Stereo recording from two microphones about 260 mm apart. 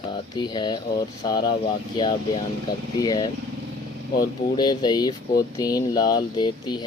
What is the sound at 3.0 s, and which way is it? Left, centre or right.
Speech, centre.